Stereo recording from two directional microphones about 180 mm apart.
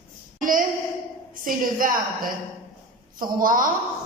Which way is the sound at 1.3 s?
50° right (ahead or behind).